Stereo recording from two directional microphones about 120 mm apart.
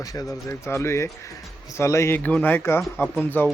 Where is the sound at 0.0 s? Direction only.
30° left (ahead or behind).